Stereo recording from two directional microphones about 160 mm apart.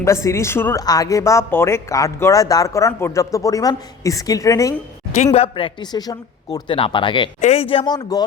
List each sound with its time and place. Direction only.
0.0 s speech: 20° left (ahead or behind)
5.1 s speech: 45° left (ahead or behind); by 8.2 s 25° left (ahead or behind)